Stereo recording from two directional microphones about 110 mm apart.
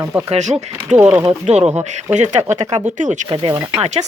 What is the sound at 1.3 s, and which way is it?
Speech, 75° right (ahead or behind).